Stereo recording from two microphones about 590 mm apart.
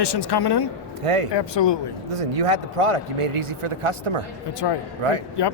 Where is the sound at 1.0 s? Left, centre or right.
Right.